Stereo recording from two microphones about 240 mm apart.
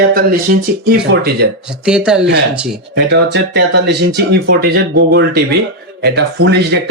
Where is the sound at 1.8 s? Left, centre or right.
Centre.